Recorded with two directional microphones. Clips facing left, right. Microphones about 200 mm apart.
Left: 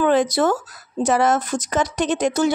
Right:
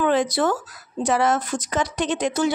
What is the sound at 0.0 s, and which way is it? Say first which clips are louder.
A woman's voice: left 3 dB; 45° left (ahead or behind).